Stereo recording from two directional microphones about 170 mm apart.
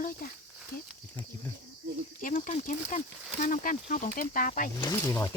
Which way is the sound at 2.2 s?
50° left (ahead or behind).